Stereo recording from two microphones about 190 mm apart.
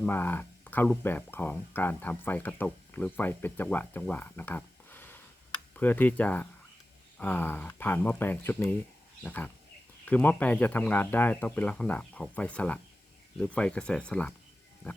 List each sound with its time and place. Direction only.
0.0 s speech: 10° left (ahead or behind)